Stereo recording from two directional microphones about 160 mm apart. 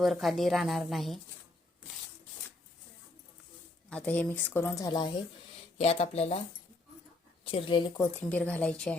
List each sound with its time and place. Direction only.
0.0 s a woman's voice: centre (ahead or behind)
3.8 s speech: 10° left (ahead or behind); by 5.1 s 25° left (ahead or behind)
5.7 s speech: 40° left (ahead or behind)
7.5 s speech: 30° left (ahead or behind)
8.1 s speech: 10° left (ahead or behind)